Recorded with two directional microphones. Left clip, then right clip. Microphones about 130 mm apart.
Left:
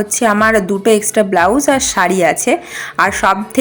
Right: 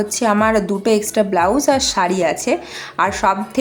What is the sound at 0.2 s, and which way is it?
Speech, 20° left (ahead or behind).